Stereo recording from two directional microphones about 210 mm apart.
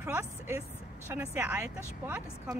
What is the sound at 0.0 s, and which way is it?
A woman's voice, 10° right (ahead or behind).